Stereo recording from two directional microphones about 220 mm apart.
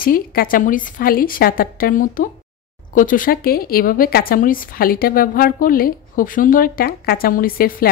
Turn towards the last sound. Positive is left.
turn(degrees=40)  # may be behind; listen again after turning